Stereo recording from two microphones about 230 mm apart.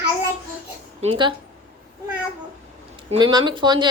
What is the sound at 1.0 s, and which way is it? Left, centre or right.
Speech, right.